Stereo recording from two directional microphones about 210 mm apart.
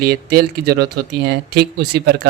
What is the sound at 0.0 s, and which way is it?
Speech, 50° right (ahead or behind).